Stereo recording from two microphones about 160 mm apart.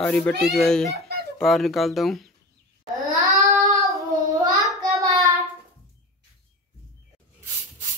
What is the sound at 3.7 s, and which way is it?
Child singing, 20° right (ahead or behind).